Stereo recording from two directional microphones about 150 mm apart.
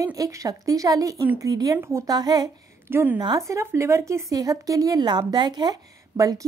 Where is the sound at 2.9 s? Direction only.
15° right (ahead or behind).